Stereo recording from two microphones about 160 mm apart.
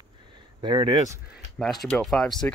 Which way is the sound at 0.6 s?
30° right (ahead or behind).